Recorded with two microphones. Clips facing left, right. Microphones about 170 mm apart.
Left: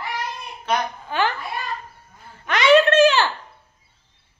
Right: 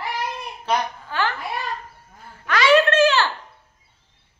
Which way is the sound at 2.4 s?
20° left (ahead or behind).